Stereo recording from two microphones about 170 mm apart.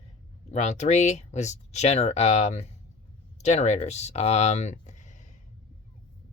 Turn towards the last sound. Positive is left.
turn(degrees=45)  # may be behind; listen again after turning